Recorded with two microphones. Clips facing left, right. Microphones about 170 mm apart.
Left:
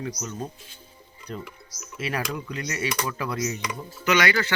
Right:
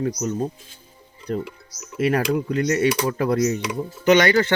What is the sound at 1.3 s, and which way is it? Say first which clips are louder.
A man's voice: right 10 dB; 60° right (ahead or behind).